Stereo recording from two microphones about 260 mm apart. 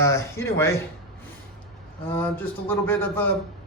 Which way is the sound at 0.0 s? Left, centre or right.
Centre.